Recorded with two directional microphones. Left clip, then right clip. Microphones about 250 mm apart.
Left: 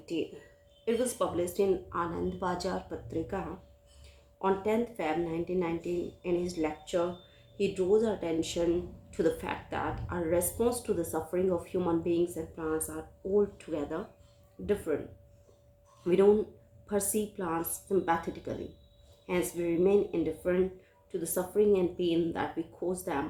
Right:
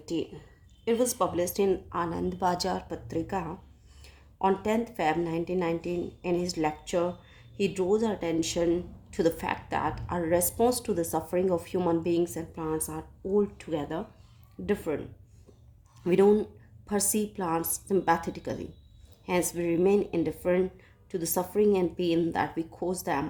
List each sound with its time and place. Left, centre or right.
0.9 s a woman's voice: right
16.0 s a woman's voice: right